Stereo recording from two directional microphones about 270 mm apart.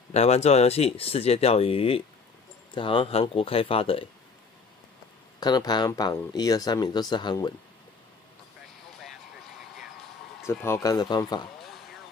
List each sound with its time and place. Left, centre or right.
0.1 s speech: left
5.4 s speech: centre
10.4 s speech: centre